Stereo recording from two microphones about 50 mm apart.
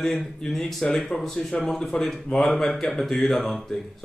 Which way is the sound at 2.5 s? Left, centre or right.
Centre.